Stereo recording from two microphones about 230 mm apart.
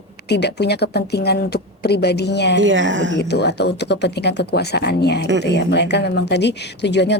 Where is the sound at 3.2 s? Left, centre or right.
Left.